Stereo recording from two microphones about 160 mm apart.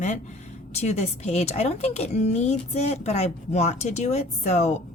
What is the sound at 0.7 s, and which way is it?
A woman's voice, 45° left (ahead or behind).